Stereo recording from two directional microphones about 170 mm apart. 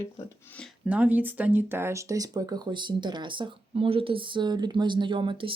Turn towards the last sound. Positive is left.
turn(degrees=-30)  # may be behind; listen again after turning